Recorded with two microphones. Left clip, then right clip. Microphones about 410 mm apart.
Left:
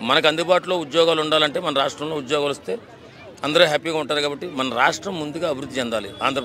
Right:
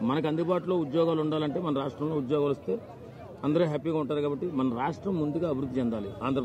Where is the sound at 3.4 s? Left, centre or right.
Centre.